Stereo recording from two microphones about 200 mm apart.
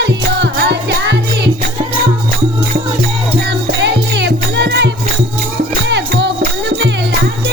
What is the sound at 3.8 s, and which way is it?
Music, 60° right (ahead or behind).